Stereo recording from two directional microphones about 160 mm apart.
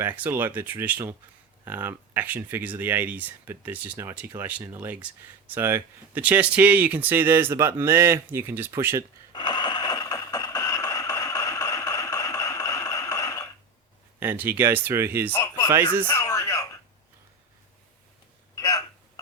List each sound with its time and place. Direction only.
0.0 s speech: 10° right (ahead or behind)
9.3 s a sound: 25° left (ahead or behind)
14.2 s speech: 10° right (ahead or behind)
15.3 s speech: 20° left (ahead or behind)
16.0 s a sound: 20° left (ahead or behind)
18.5 s hiccup: 20° left (ahead or behind)